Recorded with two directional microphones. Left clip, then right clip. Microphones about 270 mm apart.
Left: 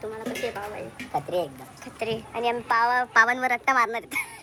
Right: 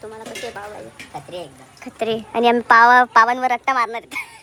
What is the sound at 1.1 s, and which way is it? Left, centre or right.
Speech, centre.